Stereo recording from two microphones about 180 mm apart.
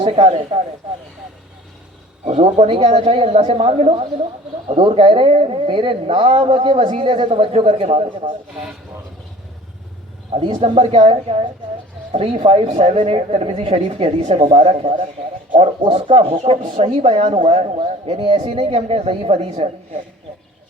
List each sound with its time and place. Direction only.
0.0 s speech: 30° right (ahead or behind)
2.2 s speech: 35° right (ahead or behind)
10.3 s speech: 30° right (ahead or behind)